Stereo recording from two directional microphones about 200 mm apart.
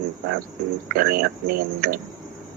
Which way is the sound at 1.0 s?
50° right (ahead or behind).